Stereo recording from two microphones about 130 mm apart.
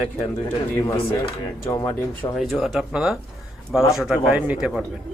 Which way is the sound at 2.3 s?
Centre (ahead or behind).